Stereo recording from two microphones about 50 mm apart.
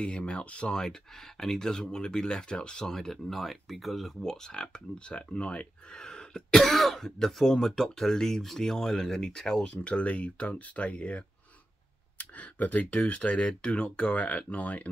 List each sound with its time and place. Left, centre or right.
0.0 s speech: left
1.4 s speech: centre
6.6 s speech: centre
9.7 s speech: left